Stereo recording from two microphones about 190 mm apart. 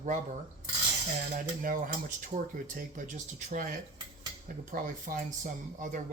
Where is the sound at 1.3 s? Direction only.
45° right (ahead or behind).